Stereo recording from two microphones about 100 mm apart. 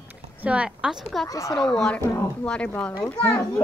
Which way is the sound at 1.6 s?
5° left (ahead or behind).